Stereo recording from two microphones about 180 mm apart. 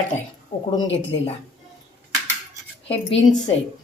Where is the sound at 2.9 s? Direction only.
35° left (ahead or behind).